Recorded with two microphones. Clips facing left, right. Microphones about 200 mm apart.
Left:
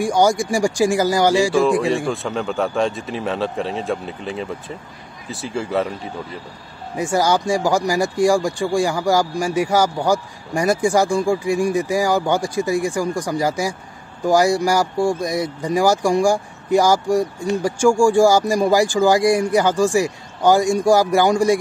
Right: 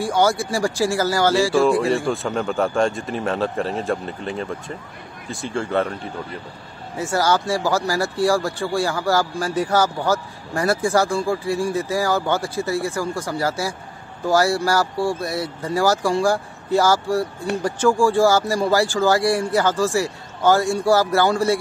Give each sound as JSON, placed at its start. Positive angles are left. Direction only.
{"t": 0.0, "sound": "speech", "side_deg": 15}
{"t": 1.5, "sound": "speech", "side_deg": 0}
{"t": 7.0, "sound": "speech", "side_deg": 15}